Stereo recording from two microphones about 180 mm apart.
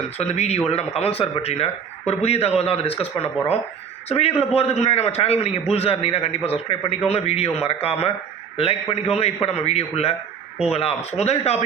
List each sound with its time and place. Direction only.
0.2 s a man's voice: 35° left (ahead or behind)